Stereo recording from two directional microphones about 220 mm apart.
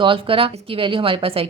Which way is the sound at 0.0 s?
25° right (ahead or behind).